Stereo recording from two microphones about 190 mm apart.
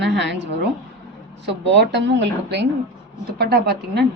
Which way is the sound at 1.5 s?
65° right (ahead or behind).